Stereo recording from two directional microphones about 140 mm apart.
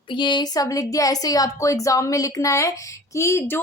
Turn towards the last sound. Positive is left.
turn(degrees=20)  # may be behind; listen again after turning